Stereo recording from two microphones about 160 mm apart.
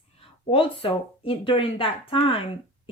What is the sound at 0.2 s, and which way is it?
A woman's voice, 35° left (ahead or behind).